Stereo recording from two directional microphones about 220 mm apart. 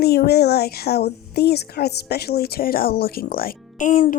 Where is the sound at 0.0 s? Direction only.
45° left (ahead or behind).